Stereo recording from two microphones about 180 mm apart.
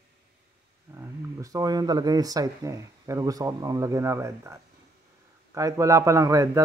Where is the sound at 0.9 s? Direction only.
15° right (ahead or behind).